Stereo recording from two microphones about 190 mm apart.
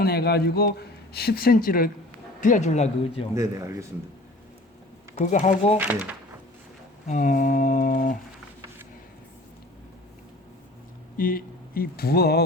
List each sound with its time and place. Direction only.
0.0 s a man's voice: 60° left (ahead or behind); by 3.2 s 35° left (ahead or behind)
3.3 s speech: 15° right (ahead or behind)
5.1 s speech: 40° left (ahead or behind)
5.7 s speech: 10° right (ahead or behind)
7.1 s speech: 40° left (ahead or behind)
11.2 s speech: 50° left (ahead or behind)